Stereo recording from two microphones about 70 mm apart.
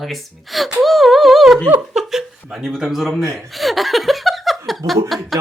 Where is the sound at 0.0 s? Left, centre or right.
Centre.